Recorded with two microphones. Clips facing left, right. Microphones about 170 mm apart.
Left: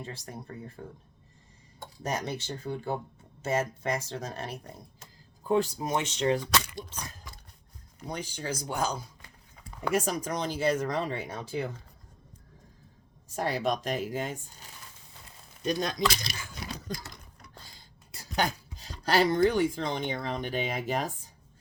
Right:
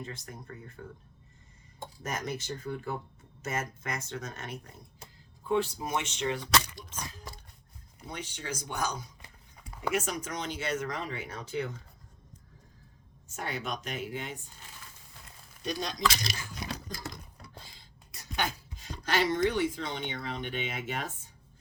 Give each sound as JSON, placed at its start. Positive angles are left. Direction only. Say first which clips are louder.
{"t": 0.0, "sound": "speech", "louder": "left 2 dB", "side_deg": 30}
{"t": 2.0, "sound": "speech", "louder": "left 3 dB", "side_deg": 30}
{"t": 13.2, "sound": "speech", "louder": "left 8 dB", "side_deg": 35}
{"t": 15.6, "sound": "speech", "louder": "left 5 dB", "side_deg": 50}
{"t": 16.6, "sound": "a sound", "louder": "right 1 dB", "side_deg": -20}
{"t": 18.1, "sound": "speech", "louder": "left 4 dB", "side_deg": 35}